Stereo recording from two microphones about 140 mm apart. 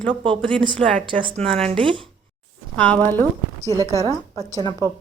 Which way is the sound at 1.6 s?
35° right (ahead or behind).